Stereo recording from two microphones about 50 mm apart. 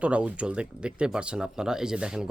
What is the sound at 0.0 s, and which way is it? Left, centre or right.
Speech, right.